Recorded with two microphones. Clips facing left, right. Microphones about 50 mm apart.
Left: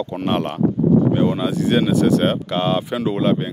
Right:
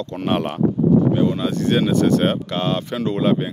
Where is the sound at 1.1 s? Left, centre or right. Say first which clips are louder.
Left 1 dB; centre.